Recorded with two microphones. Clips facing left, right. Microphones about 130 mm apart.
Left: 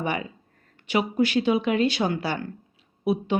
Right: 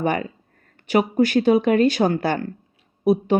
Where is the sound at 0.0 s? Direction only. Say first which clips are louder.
Right 6 dB; 45° right (ahead or behind).